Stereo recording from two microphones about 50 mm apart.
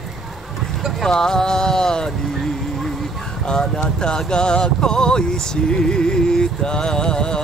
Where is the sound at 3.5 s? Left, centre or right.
Centre.